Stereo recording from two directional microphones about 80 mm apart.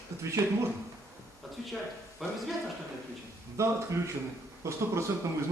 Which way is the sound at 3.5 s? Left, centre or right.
Right.